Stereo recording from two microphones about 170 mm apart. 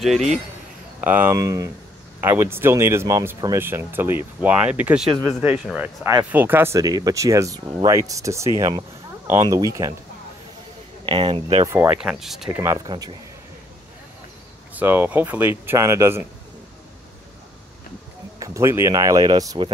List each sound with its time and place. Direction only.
0.0 s speech: centre (ahead or behind)
1.0 s speech: 10° right (ahead or behind)
11.1 s speech: 30° right (ahead or behind)
11.6 s speech: 15° right (ahead or behind)
12.0 s speech: 5° right (ahead or behind)
12.4 s speech: 20° right (ahead or behind)
14.7 s speech: 10° right (ahead or behind)
18.4 s speech: 15° right (ahead or behind)